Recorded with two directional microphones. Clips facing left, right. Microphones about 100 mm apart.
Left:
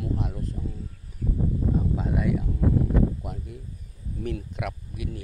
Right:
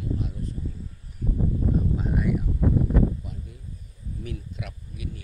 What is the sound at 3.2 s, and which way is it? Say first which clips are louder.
Speech: left 4 dB; 80° left.